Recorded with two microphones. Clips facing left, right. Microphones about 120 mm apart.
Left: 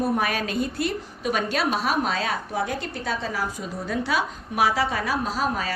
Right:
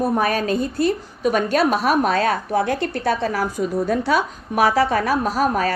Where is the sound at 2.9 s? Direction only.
65° right (ahead or behind).